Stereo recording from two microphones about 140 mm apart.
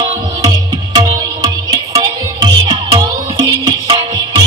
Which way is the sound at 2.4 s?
30° right (ahead or behind).